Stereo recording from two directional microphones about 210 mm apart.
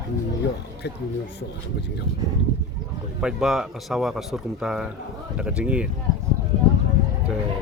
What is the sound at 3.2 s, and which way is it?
Speech, 5° right (ahead or behind).